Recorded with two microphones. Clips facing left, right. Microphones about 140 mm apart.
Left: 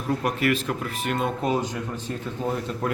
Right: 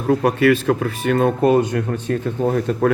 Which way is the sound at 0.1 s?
70° right (ahead or behind).